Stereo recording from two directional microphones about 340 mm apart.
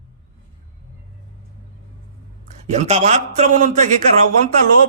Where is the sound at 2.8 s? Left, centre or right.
Centre.